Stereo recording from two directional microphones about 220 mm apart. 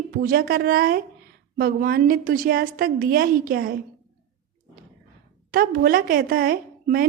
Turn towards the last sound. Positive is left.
turn(degrees=-40)  # may be behind; listen again after turning